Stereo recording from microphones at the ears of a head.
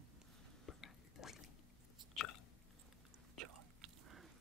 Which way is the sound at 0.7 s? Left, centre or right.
Left.